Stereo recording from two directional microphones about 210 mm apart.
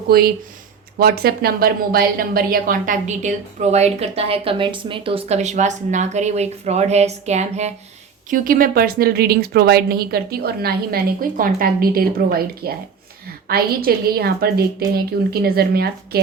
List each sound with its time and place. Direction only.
0.1 s a woman's voice: 45° right (ahead or behind)